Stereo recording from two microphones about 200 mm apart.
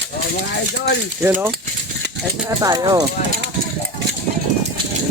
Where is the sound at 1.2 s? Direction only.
10° right (ahead or behind).